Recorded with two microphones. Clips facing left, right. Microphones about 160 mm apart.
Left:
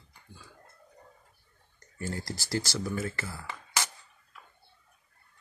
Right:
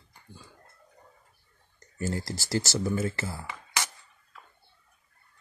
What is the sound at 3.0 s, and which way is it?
Speech, 30° right (ahead or behind).